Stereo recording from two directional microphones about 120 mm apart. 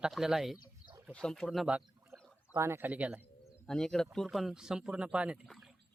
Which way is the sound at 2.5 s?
25° right (ahead or behind).